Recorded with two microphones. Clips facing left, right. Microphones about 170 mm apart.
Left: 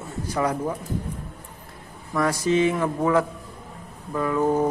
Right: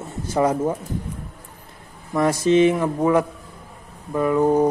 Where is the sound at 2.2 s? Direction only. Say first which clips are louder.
Right 5 dB; 20° right (ahead or behind).